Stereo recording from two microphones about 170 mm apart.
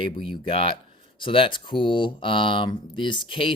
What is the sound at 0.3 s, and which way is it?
Speech, 35° left (ahead or behind).